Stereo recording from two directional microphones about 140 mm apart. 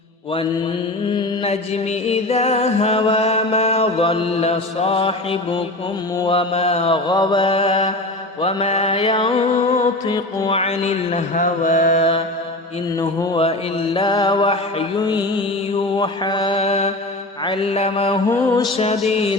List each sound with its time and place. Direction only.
1.5 s music: 50° left (ahead or behind)
9.0 s mantra: 35° left (ahead or behind)
10.1 s music: 30° left (ahead or behind)
10.5 s mantra: 50° left (ahead or behind); by 12.0 s 65° left (ahead or behind)
13.4 s mantra: 40° left (ahead or behind)
15.0 s music: 30° left (ahead or behind)
16.0 s mantra: 30° left (ahead or behind)
16.6 s music: 50° left (ahead or behind)
17.4 s music: 40° left (ahead or behind)
18.3 s music: 25° left (ahead or behind)
18.8 s music: 50° left (ahead or behind)